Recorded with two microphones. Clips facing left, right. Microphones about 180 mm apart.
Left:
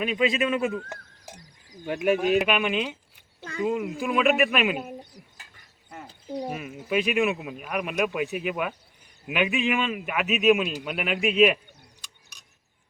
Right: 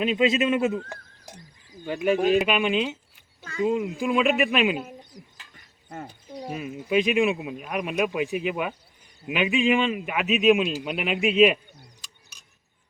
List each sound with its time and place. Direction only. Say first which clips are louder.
0.2 s speech: right 2 dB; 25° right (ahead or behind)
1.3 s a man's voice: even; 10° left (ahead or behind)
6.4 s a man's voice: right 6 dB; centre (ahead or behind)